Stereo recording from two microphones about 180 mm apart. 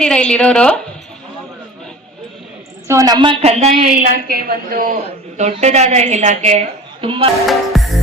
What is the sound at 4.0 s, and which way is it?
A woman's voice, 55° right (ahead or behind).